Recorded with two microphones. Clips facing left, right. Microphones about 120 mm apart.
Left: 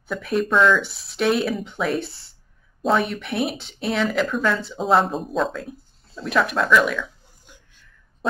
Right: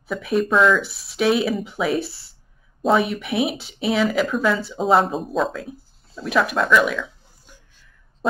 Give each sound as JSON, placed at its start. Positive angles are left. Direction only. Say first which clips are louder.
{"t": 0.0, "sound": "speech", "louder": "right 2 dB", "side_deg": 0}